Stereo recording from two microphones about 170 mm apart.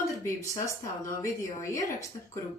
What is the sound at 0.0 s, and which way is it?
Speech, 20° left (ahead or behind).